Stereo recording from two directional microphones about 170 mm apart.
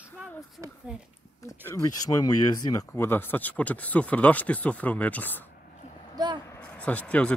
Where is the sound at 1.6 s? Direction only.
20° left (ahead or behind).